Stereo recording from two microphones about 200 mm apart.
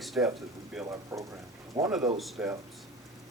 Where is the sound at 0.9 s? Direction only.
15° right (ahead or behind).